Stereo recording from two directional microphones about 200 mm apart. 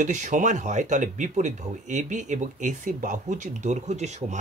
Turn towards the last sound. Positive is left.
turn(degrees=-35)  # may be behind; listen again after turning